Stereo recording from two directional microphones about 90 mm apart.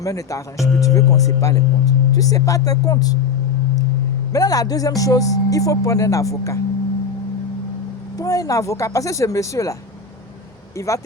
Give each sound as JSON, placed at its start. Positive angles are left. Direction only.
{"t": 0.0, "sound": "speech", "side_deg": 40}
{"t": 4.3, "sound": "speech", "side_deg": 40}
{"t": 8.2, "sound": "speech", "side_deg": 40}
{"t": 10.8, "sound": "speech", "side_deg": 35}